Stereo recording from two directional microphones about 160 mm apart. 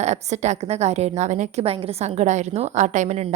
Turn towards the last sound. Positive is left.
turn(degrees=-45)  # may be behind; listen again after turning